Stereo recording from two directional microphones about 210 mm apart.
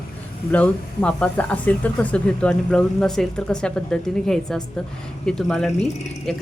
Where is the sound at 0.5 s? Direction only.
5° left (ahead or behind).